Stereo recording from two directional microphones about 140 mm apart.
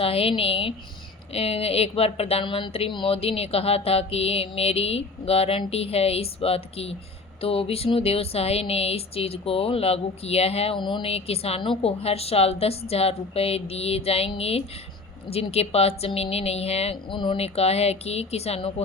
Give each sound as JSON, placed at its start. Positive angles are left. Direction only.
{"t": 0.0, "sound": "speech", "side_deg": 45}